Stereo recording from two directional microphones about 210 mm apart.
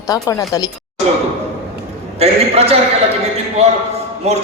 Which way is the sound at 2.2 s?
30° right (ahead or behind).